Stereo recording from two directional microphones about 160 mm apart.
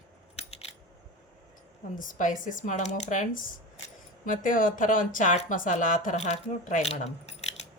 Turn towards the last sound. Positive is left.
turn(degrees=45)  # may be behind; listen again after turning